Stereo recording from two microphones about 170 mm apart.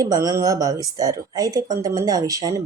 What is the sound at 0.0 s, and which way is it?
Speech, 20° right (ahead or behind).